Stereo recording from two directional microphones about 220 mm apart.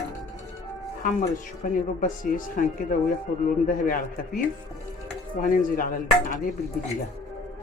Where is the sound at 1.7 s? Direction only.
40° left (ahead or behind).